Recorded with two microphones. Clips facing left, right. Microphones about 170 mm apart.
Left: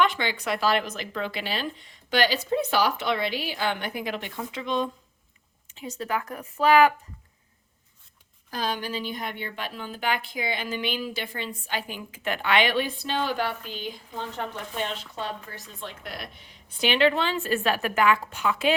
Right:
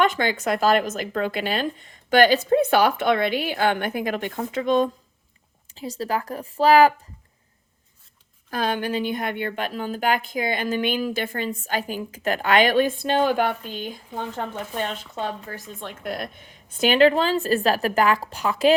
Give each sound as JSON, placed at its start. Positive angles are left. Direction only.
{"t": 0.0, "sound": "speech", "side_deg": -45}
{"t": 5.7, "sound": "a woman's voice", "side_deg": -35}
{"t": 8.4, "sound": "speech", "side_deg": -60}